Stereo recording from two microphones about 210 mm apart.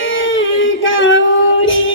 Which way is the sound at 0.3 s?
65° left (ahead or behind).